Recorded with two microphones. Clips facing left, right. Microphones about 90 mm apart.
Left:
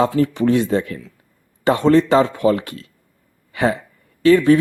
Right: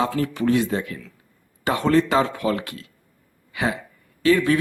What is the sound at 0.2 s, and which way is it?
Speech, 30° left (ahead or behind).